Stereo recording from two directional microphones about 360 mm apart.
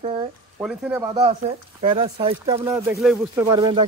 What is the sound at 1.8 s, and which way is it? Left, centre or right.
Speech, centre.